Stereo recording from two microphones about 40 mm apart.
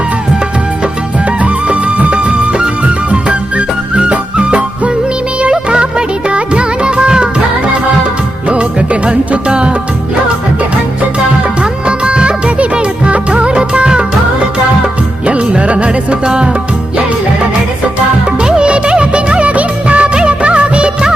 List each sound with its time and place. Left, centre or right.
1.6 s music of bollywood: right
3.9 s music: right
8.4 s music: right
11.6 s music: right
15.3 s music: right
18.4 s music of bollywood: right